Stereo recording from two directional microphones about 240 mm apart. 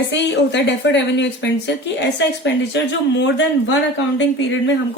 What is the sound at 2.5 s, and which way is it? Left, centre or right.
Speech, left.